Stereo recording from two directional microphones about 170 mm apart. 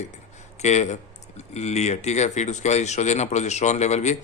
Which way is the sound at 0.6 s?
40° left (ahead or behind).